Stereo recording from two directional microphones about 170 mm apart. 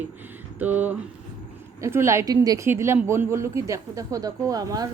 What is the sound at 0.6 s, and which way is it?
Speech, 10° right (ahead or behind).